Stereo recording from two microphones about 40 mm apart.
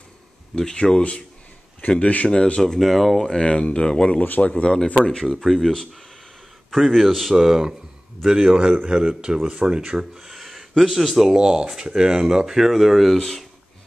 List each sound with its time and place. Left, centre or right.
0.7 s speech: left
1.8 s speech: left
2.2 s speech: left
2.6 s speech: centre
3.3 s speech: left
5.0 s speech: centre
5.4 s speech: centre
6.7 s speech: centre
7.3 s speech: centre
10.1 s a sound: centre
10.8 s speech: centre
11.2 s speech: centre